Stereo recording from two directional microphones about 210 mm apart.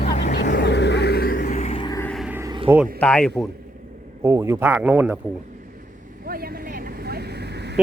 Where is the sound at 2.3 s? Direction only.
15° right (ahead or behind).